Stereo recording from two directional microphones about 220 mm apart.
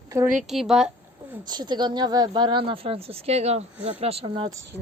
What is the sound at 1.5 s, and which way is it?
Speech, 20° right (ahead or behind).